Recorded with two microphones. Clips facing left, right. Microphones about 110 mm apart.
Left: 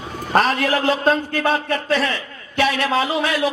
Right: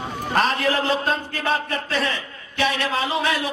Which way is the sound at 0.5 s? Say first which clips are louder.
Left 2 dB; 30° right (ahead or behind).